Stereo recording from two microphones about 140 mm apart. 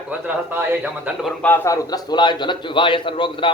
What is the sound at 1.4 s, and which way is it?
A man's voice, 15° left (ahead or behind).